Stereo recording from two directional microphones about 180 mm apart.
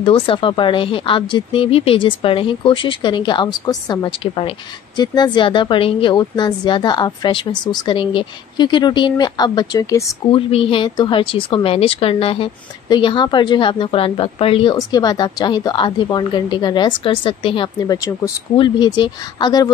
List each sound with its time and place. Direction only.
0.0 s a woman's voice: 30° left (ahead or behind)
10.3 s a woman's voice: 30° left (ahead or behind)